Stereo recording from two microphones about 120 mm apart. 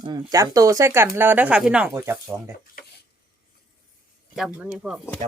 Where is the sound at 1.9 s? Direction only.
20° right (ahead or behind).